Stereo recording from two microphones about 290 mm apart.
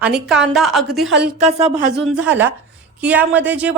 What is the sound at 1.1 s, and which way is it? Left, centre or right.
Speech, right.